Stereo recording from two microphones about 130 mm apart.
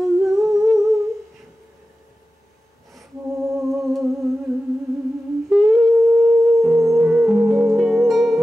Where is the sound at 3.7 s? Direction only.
Centre (ahead or behind).